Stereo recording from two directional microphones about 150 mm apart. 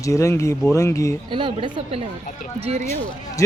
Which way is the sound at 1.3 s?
35° right (ahead or behind).